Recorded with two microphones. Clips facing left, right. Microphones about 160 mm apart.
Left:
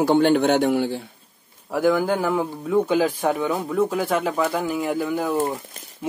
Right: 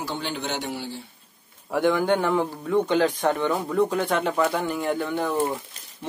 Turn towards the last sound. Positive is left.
turn(degrees=5)  # may be behind; listen again after turning